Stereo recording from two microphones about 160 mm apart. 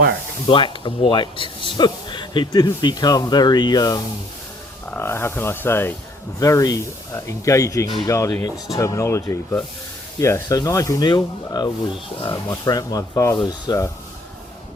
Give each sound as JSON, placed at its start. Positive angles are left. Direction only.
{"t": 0.4, "sound": "speech", "side_deg": 35}
{"t": 4.9, "sound": "speech", "side_deg": 15}